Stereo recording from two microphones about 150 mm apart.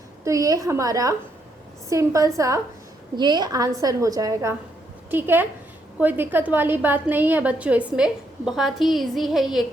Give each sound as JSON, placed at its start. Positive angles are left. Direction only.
{"t": 0.3, "sound": "a woman's voice", "side_deg": -25}